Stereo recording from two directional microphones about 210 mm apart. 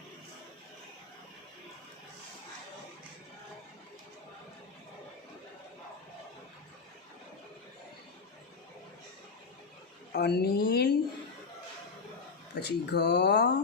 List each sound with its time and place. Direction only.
10.1 s speech: 50° left (ahead or behind)
12.5 s speech: 50° left (ahead or behind)